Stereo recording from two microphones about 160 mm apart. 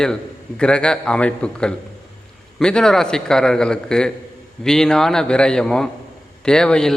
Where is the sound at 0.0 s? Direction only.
5° left (ahead or behind).